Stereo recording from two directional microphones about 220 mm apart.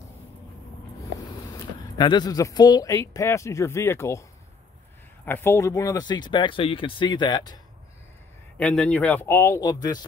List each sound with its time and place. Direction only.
2.0 s speech: 20° left (ahead or behind)
5.2 s speech: 10° left (ahead or behind)
8.5 s speech: 5° left (ahead or behind)